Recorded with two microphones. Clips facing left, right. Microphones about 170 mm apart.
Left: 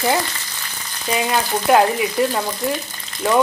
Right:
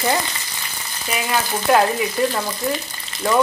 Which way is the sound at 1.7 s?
15° left (ahead or behind).